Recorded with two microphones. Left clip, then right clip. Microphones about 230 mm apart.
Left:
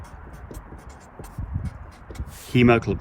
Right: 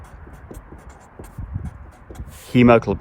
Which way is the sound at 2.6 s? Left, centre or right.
Right.